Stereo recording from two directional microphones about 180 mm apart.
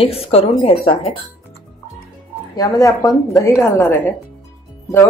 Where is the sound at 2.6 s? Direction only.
20° left (ahead or behind).